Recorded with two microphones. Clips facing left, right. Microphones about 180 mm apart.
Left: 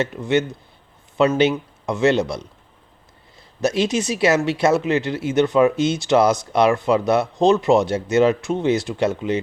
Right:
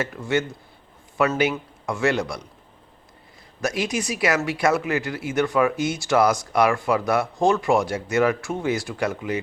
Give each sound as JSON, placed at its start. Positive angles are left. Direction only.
{"t": 0.0, "sound": "a man's voice", "side_deg": 20}
{"t": 3.6, "sound": "speech", "side_deg": 25}